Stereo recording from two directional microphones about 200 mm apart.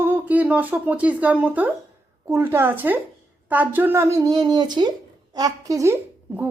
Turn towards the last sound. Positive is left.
turn(degrees=-15)  # may be behind; listen again after turning